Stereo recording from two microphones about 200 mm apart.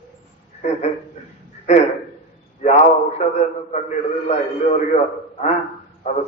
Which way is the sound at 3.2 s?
35° left (ahead or behind).